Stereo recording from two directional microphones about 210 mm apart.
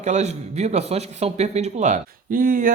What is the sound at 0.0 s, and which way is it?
A man's voice, 35° right (ahead or behind).